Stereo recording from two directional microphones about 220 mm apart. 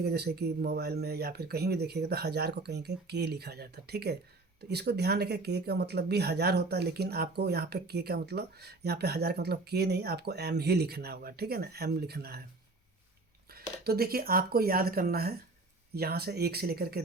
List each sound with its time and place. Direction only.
0.0 s speech: 50° right (ahead or behind)
13.5 s speech: 45° right (ahead or behind)